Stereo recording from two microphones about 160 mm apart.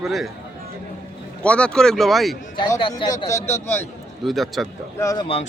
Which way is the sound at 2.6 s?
30° left (ahead or behind).